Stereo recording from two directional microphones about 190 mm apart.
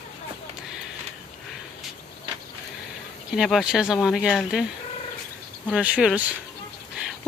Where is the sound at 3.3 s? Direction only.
Centre (ahead or behind).